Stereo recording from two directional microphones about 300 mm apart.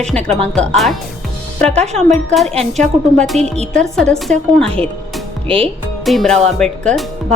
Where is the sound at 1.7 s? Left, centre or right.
Right.